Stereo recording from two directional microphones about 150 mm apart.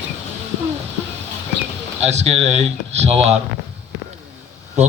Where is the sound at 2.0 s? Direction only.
45° right (ahead or behind).